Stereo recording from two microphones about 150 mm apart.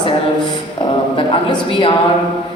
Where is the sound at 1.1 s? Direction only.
35° left (ahead or behind).